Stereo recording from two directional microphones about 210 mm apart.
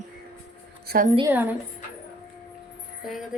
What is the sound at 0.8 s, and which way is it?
Speech, 40° right (ahead or behind).